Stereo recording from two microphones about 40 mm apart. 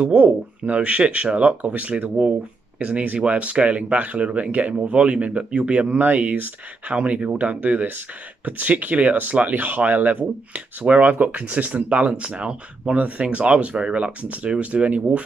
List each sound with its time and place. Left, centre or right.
0.0 s speech: right